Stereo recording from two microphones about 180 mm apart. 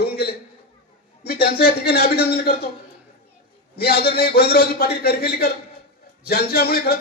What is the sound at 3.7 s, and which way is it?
A man's voice, 60° left (ahead or behind).